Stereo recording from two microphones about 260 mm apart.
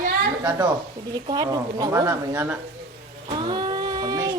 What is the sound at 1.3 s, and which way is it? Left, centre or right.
A man's voice, centre.